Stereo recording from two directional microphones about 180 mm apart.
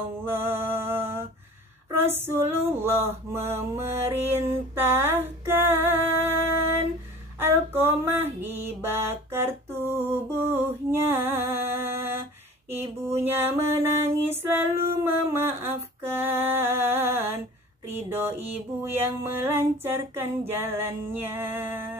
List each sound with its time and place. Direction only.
0.2 s music: 10° right (ahead or behind)
3.3 s mantra: 15° right (ahead or behind)
7.3 s a sound: 10° right (ahead or behind)
12.6 s music: 10° right (ahead or behind)